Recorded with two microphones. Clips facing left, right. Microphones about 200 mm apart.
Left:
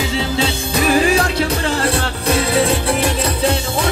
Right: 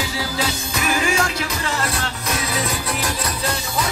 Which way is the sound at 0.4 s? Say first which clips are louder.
Left 6 dB; 35° left (ahead or behind).